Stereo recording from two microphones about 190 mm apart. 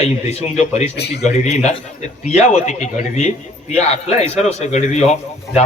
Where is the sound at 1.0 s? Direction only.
60° left (ahead or behind).